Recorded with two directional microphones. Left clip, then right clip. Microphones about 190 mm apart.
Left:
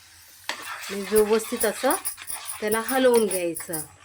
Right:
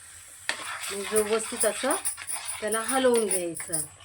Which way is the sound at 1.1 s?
45° left (ahead or behind).